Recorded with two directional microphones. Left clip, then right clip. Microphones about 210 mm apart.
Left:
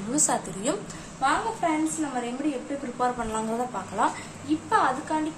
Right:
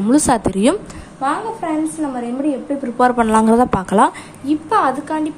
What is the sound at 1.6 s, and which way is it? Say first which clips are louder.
Speech: right 4 dB; 30° right (ahead or behind).